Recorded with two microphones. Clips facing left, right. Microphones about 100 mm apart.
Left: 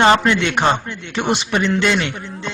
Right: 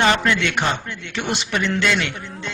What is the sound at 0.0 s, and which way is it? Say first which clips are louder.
A man's voice: left 4 dB; 30° left (ahead or behind).